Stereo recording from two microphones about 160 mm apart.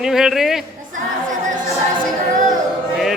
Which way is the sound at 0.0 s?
Centre (ahead or behind).